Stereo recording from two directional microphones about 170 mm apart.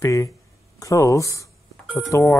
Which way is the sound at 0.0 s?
20° left (ahead or behind).